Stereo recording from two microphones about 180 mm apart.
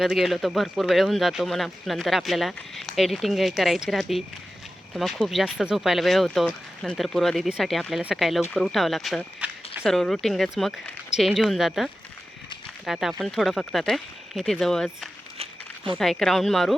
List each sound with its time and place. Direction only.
0.0 s speech: centre (ahead or behind)
15.4 s a sound: 30° right (ahead or behind)
16.0 s speech: centre (ahead or behind)